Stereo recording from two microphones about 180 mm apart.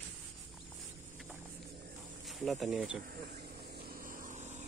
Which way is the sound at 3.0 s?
55° right (ahead or behind).